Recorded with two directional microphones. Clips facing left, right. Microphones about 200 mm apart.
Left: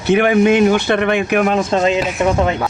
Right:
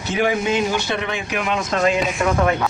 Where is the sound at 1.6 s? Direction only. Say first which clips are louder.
Left 4 dB; 30° left (ahead or behind).